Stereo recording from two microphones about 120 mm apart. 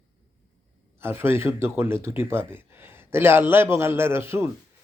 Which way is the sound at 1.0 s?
20° right (ahead or behind).